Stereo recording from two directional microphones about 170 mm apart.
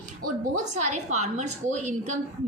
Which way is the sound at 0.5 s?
45° right (ahead or behind).